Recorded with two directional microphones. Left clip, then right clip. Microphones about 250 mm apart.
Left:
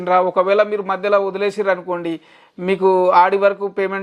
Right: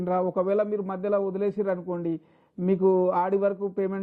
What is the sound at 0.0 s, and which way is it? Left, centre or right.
Speech, centre.